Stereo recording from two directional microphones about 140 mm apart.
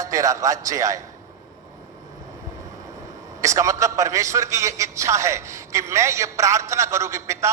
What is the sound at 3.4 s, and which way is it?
A man's voice, 20° right (ahead or behind).